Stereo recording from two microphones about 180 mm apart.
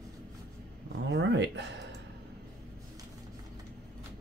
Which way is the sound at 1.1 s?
80° right.